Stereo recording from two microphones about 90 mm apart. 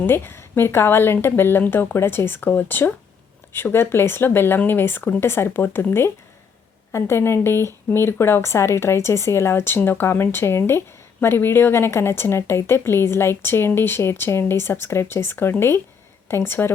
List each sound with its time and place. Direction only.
0.0 s speech: 25° left (ahead or behind)